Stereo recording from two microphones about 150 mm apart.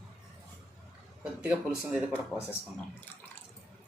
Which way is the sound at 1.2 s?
5° right (ahead or behind).